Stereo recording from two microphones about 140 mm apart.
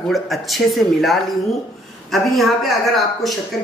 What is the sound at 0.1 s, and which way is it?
Speech, centre (ahead or behind).